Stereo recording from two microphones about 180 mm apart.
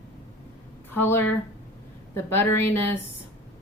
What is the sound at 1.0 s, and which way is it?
Speech, 10° left (ahead or behind).